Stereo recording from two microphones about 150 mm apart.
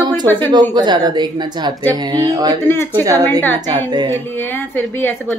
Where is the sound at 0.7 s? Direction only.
30° right (ahead or behind).